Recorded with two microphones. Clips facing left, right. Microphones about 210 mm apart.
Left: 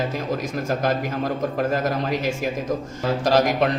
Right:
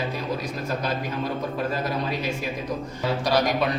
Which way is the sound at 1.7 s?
45° left (ahead or behind).